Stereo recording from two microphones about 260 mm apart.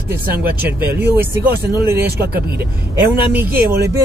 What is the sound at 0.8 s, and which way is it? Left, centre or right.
Speech, centre.